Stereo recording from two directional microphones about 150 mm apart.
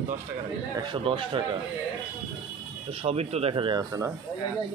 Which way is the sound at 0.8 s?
35° right (ahead or behind).